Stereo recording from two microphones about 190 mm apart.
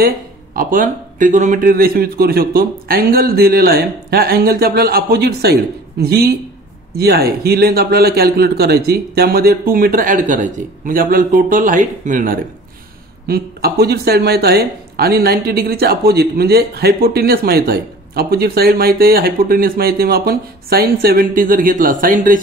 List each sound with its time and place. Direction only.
0.6 s speech: 45° right (ahead or behind)
13.3 s speech: 55° right (ahead or behind)